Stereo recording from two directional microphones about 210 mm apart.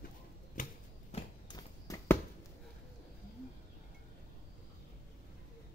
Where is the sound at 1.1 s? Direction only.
20° left (ahead or behind).